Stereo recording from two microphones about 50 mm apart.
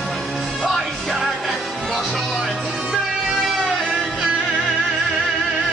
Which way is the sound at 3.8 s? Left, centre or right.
Centre.